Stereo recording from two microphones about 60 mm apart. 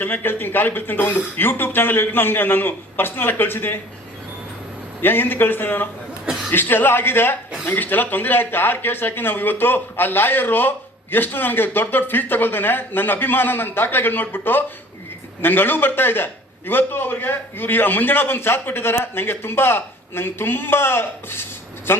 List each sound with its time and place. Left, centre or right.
0.0 s speech: left
5.0 s speech: left